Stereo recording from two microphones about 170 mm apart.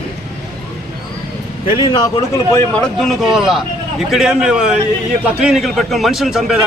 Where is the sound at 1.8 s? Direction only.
25° left (ahead or behind).